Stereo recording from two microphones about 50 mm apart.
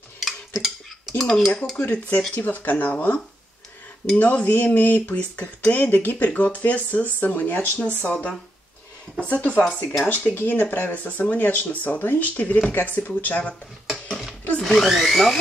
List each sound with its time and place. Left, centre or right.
0.6 s dishes: centre
1.8 s speech: left
4.2 s speech: left
14.6 s speech: centre